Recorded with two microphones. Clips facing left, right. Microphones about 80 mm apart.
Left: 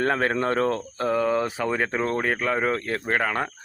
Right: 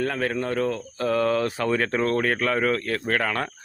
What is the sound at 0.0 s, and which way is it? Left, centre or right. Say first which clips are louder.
Speech: left 3 dB; left.